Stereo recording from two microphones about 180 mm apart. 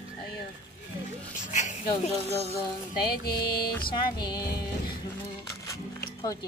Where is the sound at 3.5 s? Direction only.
55° left (ahead or behind).